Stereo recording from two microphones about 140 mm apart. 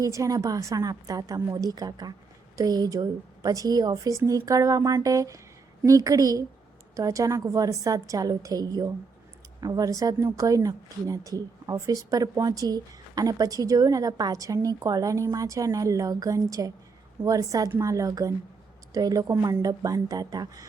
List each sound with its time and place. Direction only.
0.0 s speech: 25° right (ahead or behind)